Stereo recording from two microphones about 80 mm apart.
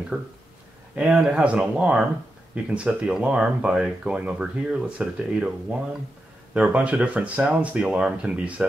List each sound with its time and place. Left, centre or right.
0.1 s speech: centre